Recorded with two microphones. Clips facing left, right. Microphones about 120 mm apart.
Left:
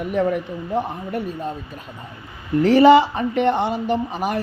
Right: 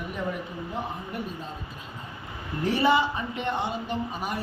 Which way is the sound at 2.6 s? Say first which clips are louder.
Left 11 dB; 90° left.